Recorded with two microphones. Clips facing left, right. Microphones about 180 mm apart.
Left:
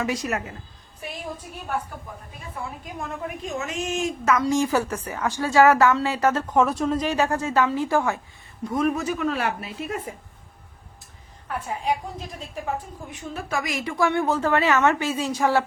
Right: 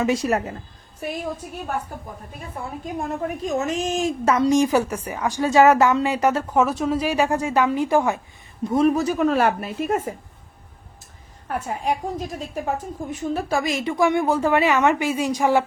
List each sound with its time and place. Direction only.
0.0 s a woman's voice: 25° right (ahead or behind)
3.0 s a woman's voice: 40° right (ahead or behind)
4.4 s a woman's voice: 15° right (ahead or behind)
8.6 s a woman's voice: 30° right (ahead or behind); by 10.2 s 45° right (ahead or behind)
11.4 s a woman's voice: 45° right (ahead or behind); by 15.6 s 15° right (ahead or behind)